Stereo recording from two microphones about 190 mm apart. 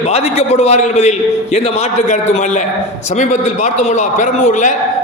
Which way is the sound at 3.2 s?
40° left (ahead or behind).